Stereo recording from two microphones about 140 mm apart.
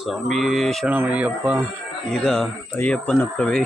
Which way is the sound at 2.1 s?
5° left (ahead or behind).